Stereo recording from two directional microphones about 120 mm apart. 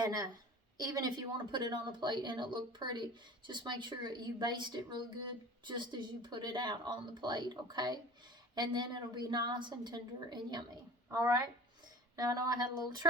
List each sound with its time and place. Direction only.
0.0 s a woman's voice: 35° right (ahead or behind)